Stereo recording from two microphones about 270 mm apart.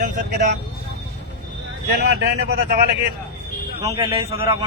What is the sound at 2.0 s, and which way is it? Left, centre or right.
Speech, right.